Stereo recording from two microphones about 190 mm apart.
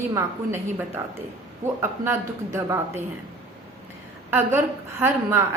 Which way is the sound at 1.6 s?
40° right (ahead or behind).